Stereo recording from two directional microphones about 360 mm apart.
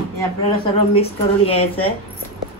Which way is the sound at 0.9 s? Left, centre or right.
Centre.